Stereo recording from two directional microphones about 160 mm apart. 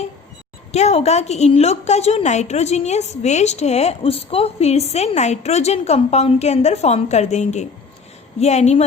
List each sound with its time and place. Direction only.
0.7 s a woman's voice: 45° left (ahead or behind)